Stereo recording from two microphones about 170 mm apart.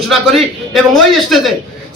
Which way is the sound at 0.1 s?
Centre (ahead or behind).